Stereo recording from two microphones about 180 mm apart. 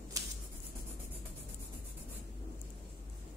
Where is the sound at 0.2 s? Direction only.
20° right (ahead or behind).